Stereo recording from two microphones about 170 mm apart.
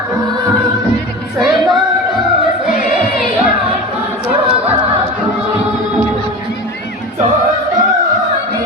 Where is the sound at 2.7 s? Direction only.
55° left (ahead or behind).